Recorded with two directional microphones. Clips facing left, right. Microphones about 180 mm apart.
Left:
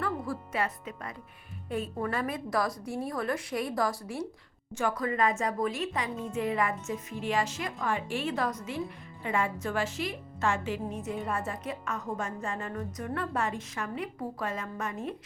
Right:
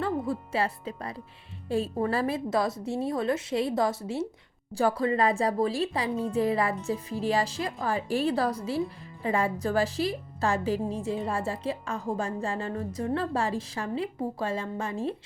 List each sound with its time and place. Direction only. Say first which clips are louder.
0.0 s speech: right 4 dB; 25° right (ahead or behind)
4.7 s a woman's voice: right 5 dB; 35° right (ahead or behind)